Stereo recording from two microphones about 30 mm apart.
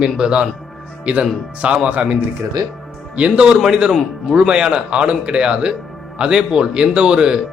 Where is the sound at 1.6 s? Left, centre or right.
Right.